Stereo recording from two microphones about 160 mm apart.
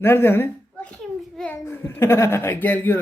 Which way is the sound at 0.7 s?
5° left (ahead or behind).